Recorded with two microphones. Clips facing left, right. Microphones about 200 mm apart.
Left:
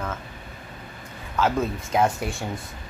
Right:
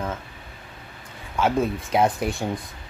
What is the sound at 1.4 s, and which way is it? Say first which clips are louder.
Speech: right 1 dB; 10° right (ahead or behind).